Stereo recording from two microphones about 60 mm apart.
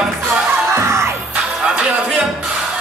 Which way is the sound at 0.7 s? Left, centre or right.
Right.